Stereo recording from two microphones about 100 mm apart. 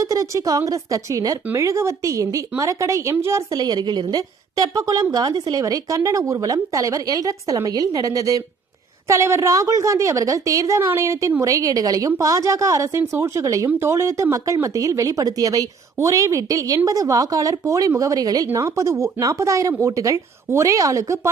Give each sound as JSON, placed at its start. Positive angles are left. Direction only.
{"t": 0.0, "sound": "a woman's voice", "side_deg": -35}
{"t": 3.6, "sound": "a woman's voice", "side_deg": -45}